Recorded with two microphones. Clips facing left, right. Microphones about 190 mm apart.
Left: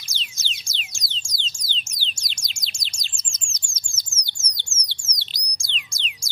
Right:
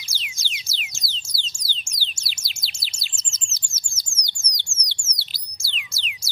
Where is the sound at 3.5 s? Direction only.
10° right (ahead or behind).